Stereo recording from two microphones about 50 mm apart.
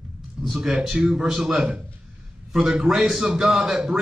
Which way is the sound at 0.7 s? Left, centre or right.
Centre.